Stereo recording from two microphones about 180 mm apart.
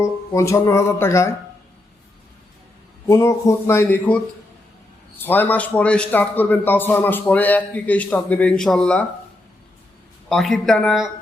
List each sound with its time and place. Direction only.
0.0 s a man's voice: 15° left (ahead or behind)
3.1 s a man's voice: 15° left (ahead or behind)
10.2 s speech: centre (ahead or behind)